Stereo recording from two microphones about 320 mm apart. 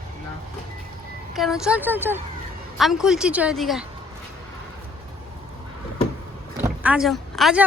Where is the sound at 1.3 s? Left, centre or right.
Centre.